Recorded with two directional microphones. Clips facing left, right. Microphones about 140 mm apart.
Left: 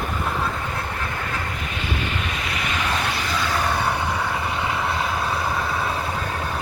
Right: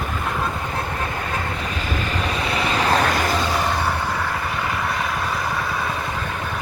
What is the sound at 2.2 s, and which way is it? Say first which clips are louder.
Vehicle: right 5 dB; 35° right (ahead or behind).